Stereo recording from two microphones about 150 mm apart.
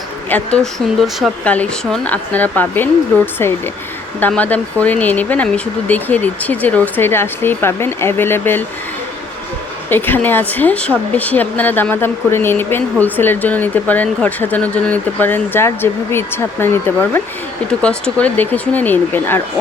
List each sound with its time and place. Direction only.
0.3 s speech: 10° left (ahead or behind)
9.9 s speech: 15° left (ahead or behind)